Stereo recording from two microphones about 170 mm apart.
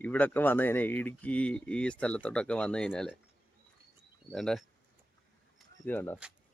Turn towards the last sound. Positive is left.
turn(degrees=10)  # may be behind; listen again after turning